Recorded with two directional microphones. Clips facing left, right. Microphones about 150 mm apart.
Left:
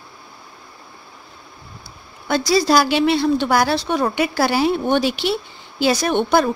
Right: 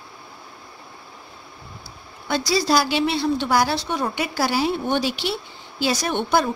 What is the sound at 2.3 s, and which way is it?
A woman's voice, 50° left (ahead or behind).